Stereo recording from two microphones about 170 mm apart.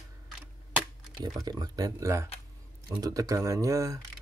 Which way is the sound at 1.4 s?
20° right (ahead or behind).